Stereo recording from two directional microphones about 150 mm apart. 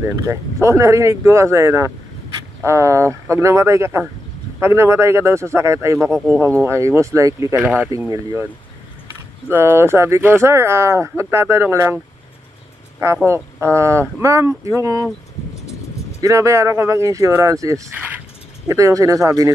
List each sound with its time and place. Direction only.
0.0 s speech: 20° right (ahead or behind)
5.9 s speech: centre (ahead or behind)
6.3 s speech: 15° right (ahead or behind)
9.5 s speech: 15° right (ahead or behind)
13.0 s speech: 20° right (ahead or behind)
16.2 s speech: 20° right (ahead or behind)
17.9 s a sound: 10° right (ahead or behind)
18.7 s speech: 20° right (ahead or behind)